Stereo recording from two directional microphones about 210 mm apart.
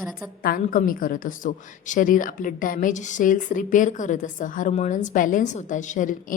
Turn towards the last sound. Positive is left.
turn(degrees=40)  # may be behind; listen again after turning